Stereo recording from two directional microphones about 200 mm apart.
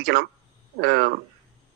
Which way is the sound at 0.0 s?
50° right (ahead or behind).